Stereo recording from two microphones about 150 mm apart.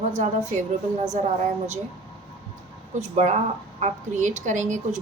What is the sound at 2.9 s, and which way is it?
A woman's voice, 50° right (ahead or behind).